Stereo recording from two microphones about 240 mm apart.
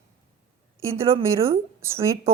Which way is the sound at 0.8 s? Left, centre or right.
Centre.